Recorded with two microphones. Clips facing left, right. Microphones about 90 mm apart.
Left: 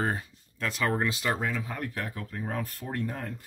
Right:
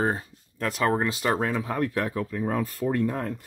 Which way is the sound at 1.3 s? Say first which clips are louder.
Right 6 dB; 60° right (ahead or behind).